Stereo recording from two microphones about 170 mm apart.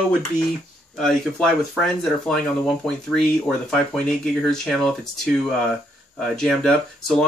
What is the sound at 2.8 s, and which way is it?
Speech, 5° left (ahead or behind).